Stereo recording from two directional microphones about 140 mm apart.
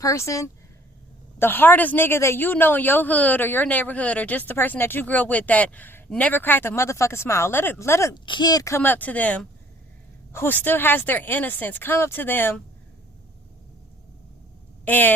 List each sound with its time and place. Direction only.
0.0 s speech: 20° left (ahead or behind)
8.1 s speech: 30° left (ahead or behind); by 12.6 s 15° left (ahead or behind)
14.8 s speech: 10° left (ahead or behind)